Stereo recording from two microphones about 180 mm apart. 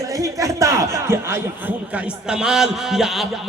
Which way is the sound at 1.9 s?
5° right (ahead or behind).